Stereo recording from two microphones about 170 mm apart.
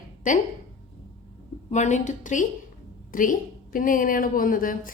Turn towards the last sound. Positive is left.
turn(degrees=55)  # may be behind; listen again after turning